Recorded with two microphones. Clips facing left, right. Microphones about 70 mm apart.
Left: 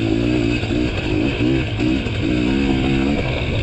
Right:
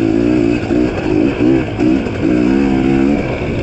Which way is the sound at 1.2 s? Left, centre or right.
Centre.